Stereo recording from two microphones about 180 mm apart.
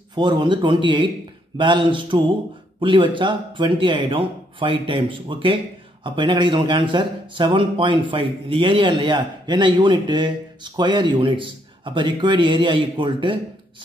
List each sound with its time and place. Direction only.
0.1 s speech: 25° right (ahead or behind)